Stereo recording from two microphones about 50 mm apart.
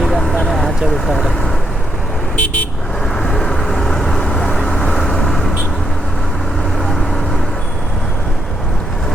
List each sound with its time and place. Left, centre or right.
0.0 s vehicle: centre
2.3 s vehicle: left
3.2 s vehicle: centre